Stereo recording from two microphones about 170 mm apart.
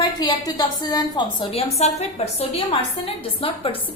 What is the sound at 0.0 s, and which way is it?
A woman's voice, 25° left (ahead or behind).